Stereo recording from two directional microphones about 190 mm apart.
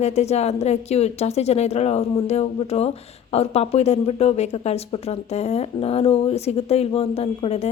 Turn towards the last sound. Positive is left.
turn(degrees=35)  # may be behind; listen again after turning